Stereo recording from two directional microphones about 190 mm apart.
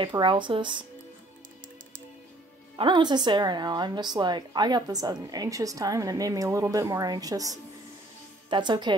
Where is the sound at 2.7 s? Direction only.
25° right (ahead or behind).